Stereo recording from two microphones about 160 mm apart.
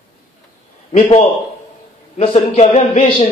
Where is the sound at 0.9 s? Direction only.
35° left (ahead or behind).